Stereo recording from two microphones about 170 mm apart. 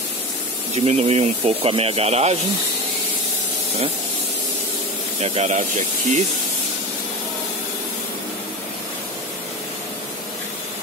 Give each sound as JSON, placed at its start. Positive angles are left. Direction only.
{"t": 0.7, "sound": "speech", "side_deg": -35}
{"t": 5.2, "sound": "speech", "side_deg": -40}